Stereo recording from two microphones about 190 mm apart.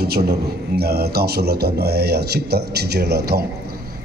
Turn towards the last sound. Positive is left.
turn(degrees=-55)  # may be behind; listen again after turning